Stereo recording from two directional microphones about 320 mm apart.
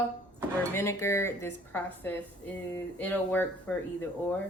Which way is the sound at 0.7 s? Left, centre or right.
Centre.